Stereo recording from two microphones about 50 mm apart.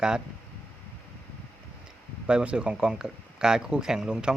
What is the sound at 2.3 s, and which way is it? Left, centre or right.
Speech, centre.